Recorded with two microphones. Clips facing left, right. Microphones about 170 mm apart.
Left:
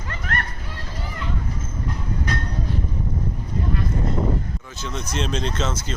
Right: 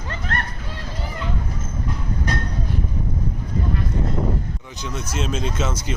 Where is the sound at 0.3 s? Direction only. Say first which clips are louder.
Even; 30° right (ahead or behind).